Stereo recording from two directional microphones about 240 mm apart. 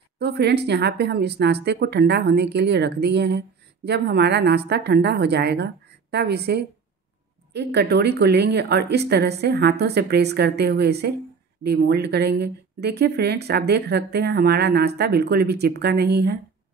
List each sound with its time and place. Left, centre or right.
0.2 s a woman's voice: right